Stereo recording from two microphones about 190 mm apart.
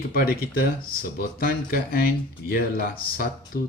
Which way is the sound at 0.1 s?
50° left (ahead or behind).